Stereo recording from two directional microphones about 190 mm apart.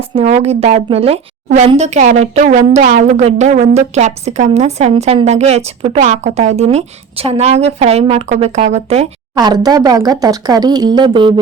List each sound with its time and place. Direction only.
0.2 s a woman's voice: 35° right (ahead or behind)
9.3 s speech: 20° right (ahead or behind)